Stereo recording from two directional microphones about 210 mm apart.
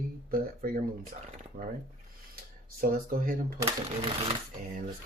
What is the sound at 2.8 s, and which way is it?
Speech, 45° right (ahead or behind).